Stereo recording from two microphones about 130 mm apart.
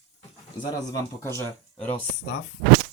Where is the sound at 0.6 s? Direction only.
30° left (ahead or behind).